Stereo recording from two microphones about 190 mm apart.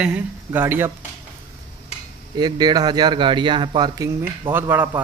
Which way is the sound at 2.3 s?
20° right (ahead or behind).